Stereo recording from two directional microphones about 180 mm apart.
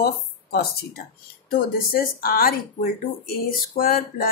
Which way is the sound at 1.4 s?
55° left (ahead or behind).